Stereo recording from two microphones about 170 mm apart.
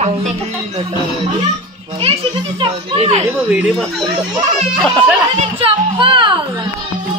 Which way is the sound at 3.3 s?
5° right (ahead or behind).